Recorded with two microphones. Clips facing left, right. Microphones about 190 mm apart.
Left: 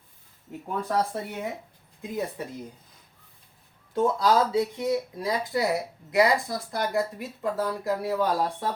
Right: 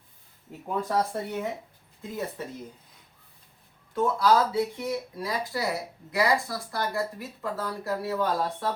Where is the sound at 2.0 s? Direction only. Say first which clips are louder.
Left 2 dB; 15° left (ahead or behind).